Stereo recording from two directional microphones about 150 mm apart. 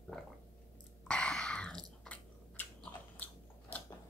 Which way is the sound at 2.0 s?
10° left (ahead or behind).